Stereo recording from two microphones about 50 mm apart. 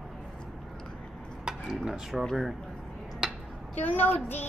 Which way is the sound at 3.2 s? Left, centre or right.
Centre.